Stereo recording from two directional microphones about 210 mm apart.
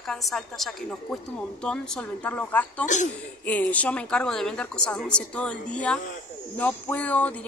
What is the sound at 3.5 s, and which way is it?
A woman's voice, 5° left (ahead or behind).